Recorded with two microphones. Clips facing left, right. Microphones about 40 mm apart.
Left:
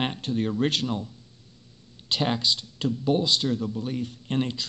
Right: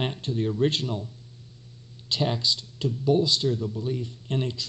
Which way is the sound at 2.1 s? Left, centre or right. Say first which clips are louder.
Left 1 dB; left.